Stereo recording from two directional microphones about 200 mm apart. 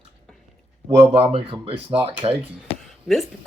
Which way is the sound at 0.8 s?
25° right (ahead or behind).